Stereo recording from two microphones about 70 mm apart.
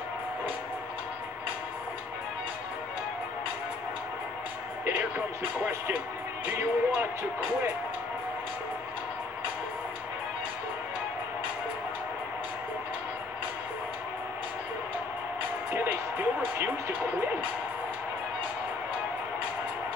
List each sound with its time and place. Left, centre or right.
4.8 s music: right
6.4 s speech: right
15.7 s music: right